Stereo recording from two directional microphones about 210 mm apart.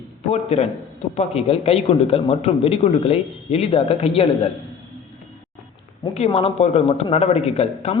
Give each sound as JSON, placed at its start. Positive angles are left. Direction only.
{"t": 0.3, "sound": "a man's voice", "side_deg": 30}
{"t": 6.1, "sound": "a man's voice", "side_deg": 25}